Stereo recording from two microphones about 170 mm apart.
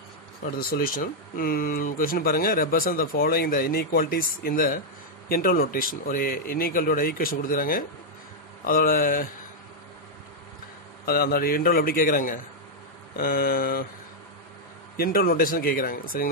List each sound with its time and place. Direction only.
0.6 s speech: 60° left (ahead or behind)
11.1 s speech: 60° left (ahead or behind)
15.0 s speech: 60° left (ahead or behind)